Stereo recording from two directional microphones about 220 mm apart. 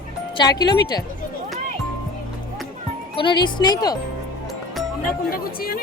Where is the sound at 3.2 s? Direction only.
20° left (ahead or behind).